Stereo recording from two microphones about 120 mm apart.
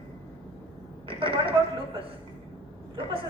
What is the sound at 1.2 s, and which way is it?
Speech, 50° right (ahead or behind).